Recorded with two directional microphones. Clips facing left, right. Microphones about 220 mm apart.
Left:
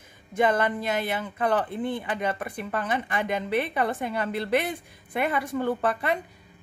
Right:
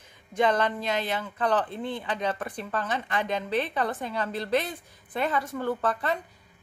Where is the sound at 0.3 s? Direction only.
10° left (ahead or behind).